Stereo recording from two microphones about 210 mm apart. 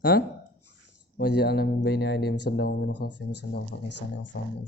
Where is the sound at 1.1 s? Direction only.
50° left (ahead or behind).